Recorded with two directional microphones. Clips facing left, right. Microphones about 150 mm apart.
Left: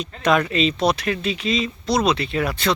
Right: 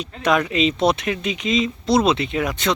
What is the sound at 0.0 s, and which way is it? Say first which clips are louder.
Speech: even; 10° right (ahead or behind).